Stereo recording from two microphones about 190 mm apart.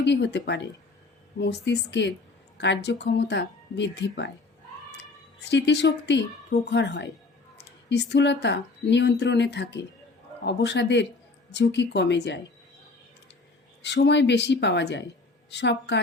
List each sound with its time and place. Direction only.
0.0 s a woman's voice: 65° left (ahead or behind)
13.8 s speech: 65° left (ahead or behind)